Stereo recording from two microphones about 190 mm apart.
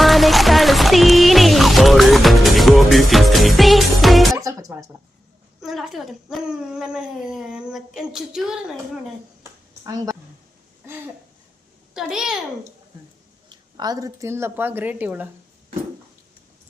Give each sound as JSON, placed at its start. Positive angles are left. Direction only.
{"t": 0.0, "sound": "music", "side_deg": 0}
{"t": 4.4, "sound": "music", "side_deg": -15}
{"t": 5.6, "sound": "speech", "side_deg": 0}
{"t": 9.4, "sound": "a sound", "side_deg": -15}
{"t": 11.9, "sound": "speech", "side_deg": 0}
{"t": 13.7, "sound": "speech", "side_deg": -20}